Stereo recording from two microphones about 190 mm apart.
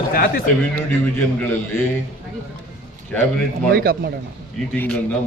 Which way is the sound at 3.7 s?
50° right (ahead or behind).